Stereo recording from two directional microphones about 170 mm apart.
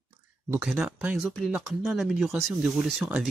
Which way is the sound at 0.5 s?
5° right (ahead or behind).